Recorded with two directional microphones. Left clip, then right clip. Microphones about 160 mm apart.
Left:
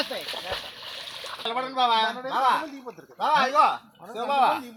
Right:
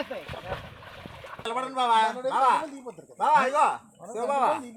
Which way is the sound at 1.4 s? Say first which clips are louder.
Left 2 dB; 50° right (ahead or behind).